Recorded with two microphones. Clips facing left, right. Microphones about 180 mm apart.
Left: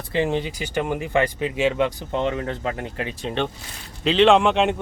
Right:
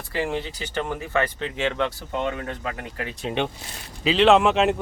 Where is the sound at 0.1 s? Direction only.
20° left (ahead or behind).